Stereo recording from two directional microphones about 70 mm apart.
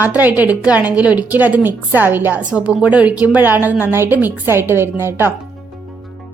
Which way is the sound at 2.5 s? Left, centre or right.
Centre.